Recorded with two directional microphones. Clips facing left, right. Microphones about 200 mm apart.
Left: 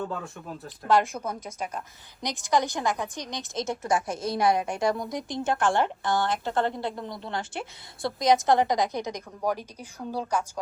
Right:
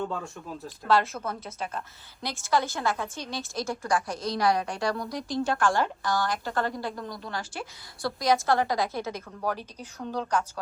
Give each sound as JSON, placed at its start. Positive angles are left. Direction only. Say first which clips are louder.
{"t": 0.0, "sound": "speech", "louder": "right 1 dB", "side_deg": 0}
{"t": 0.9, "sound": "a woman's voice", "louder": "left 1 dB", "side_deg": 15}